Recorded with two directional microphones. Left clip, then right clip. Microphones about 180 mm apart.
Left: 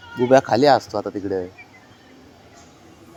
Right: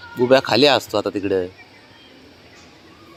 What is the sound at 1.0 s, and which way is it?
Speech, 20° right (ahead or behind).